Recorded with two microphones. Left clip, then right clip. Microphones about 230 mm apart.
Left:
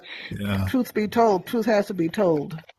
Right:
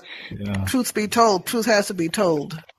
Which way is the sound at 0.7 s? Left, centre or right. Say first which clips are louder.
Right 3 dB; right.